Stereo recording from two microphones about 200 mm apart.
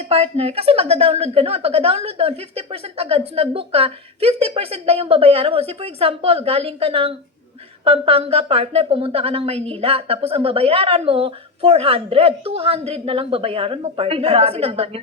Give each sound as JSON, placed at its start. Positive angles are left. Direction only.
{"t": 0.0, "sound": "a woman's voice", "side_deg": -30}